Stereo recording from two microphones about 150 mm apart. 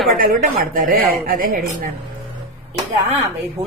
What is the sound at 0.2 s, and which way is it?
Speech, 65° right (ahead or behind).